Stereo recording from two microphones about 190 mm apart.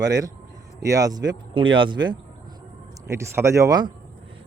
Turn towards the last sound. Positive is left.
turn(degrees=-20)  # may be behind; listen again after turning